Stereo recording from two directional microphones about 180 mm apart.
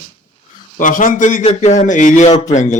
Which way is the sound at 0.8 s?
45° left (ahead or behind).